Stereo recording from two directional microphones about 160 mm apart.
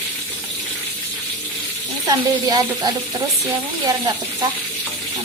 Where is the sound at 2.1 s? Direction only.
25° right (ahead or behind).